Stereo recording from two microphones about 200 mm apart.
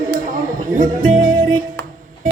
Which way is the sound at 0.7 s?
40° right (ahead or behind).